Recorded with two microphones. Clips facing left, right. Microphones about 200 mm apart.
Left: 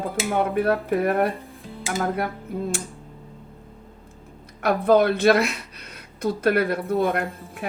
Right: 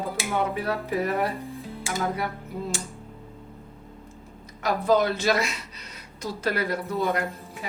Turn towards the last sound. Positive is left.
turn(degrees=60)  # may be behind; listen again after turning